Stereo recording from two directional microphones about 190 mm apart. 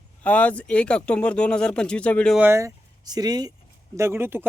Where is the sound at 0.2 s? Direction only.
5° left (ahead or behind).